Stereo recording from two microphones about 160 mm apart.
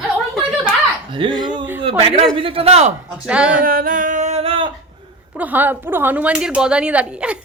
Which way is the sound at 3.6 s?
60° right (ahead or behind).